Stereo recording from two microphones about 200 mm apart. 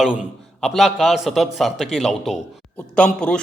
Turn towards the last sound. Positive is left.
turn(degrees=5)  # may be behind; listen again after turning